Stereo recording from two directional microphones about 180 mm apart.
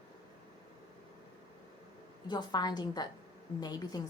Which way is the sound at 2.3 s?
25° left (ahead or behind).